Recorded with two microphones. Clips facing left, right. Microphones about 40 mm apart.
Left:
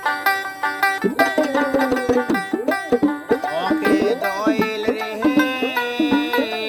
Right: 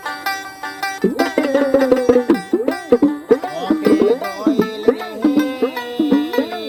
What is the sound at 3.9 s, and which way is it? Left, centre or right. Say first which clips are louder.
Music: right 4 dB; left.